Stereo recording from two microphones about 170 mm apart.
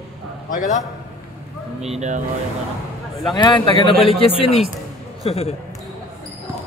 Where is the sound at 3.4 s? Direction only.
25° left (ahead or behind).